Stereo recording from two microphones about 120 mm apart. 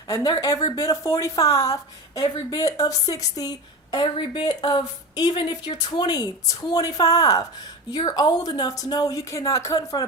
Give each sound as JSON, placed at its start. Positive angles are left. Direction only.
{"t": 0.1, "sound": "a woman's voice", "side_deg": 30}
{"t": 3.9, "sound": "a woman's voice", "side_deg": 45}